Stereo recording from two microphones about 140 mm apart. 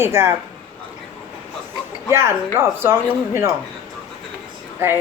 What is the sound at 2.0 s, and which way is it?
Speech, 20° right (ahead or behind).